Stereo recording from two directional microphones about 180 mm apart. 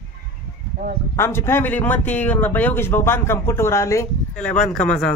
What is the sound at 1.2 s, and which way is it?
Speech, 15° left (ahead or behind).